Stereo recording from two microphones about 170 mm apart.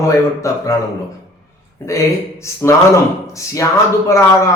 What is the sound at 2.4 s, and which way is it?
Speech, 15° left (ahead or behind).